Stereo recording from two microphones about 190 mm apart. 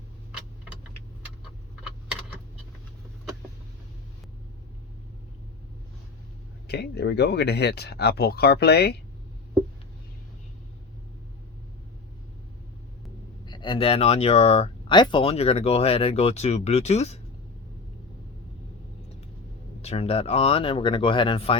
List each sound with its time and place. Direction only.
6.7 s speech: 60° left (ahead or behind)
13.4 s speech: 25° left (ahead or behind)
19.8 s speech: 35° left (ahead or behind)